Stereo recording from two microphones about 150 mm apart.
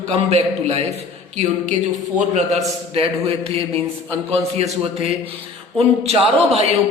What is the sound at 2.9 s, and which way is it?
A man's voice, 40° right (ahead or behind).